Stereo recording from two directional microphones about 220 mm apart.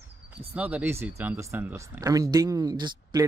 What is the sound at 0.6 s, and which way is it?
Speech, 5° right (ahead or behind).